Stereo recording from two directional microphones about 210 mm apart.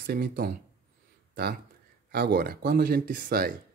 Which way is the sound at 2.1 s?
50° right (ahead or behind).